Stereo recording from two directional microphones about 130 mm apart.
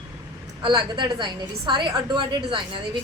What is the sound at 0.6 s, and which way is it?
A woman's voice, 35° right (ahead or behind).